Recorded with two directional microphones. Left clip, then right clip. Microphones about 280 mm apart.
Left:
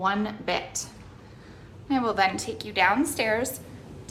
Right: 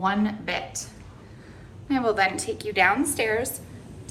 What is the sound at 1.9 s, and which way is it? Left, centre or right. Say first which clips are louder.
A woman's voice: right 1 dB; centre.